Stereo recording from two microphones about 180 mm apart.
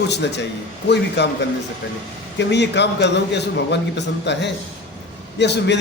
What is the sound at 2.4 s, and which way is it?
A man's voice, 70° left (ahead or behind).